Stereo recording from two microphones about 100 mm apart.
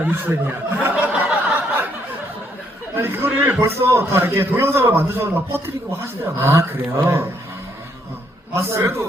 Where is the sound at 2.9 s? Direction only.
20° right (ahead or behind).